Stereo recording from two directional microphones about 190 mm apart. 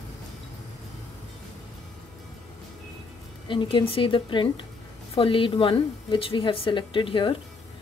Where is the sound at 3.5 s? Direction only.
25° left (ahead or behind).